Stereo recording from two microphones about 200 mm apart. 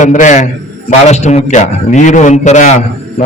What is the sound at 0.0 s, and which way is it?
A man's voice, 40° left (ahead or behind).